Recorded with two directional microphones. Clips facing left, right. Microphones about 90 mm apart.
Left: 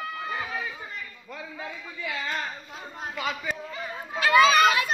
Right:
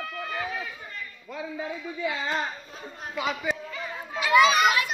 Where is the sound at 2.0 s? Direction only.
25° right (ahead or behind).